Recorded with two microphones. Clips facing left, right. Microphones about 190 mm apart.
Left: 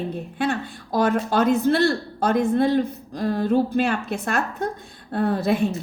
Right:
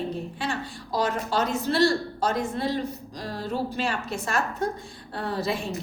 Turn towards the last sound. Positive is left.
turn(degrees=55)  # may be behind; listen again after turning